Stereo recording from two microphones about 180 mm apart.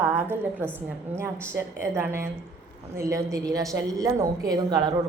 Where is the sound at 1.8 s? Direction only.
15° right (ahead or behind).